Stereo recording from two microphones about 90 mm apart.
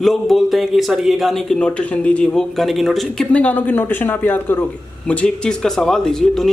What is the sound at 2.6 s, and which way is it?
Speech, centre (ahead or behind).